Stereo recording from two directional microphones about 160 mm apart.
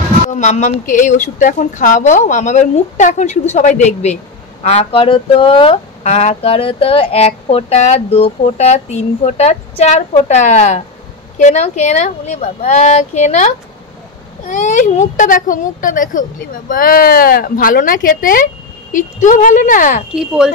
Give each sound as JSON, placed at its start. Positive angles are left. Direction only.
{"t": 0.3, "sound": "a woman's voice", "side_deg": 50}
{"t": 14.5, "sound": "speech", "side_deg": 50}
{"t": 20.1, "sound": "speech", "side_deg": -5}